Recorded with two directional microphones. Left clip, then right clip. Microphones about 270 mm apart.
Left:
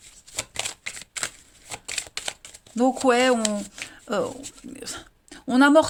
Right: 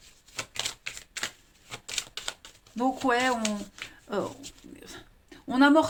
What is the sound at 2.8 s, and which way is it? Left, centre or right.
Speech, left.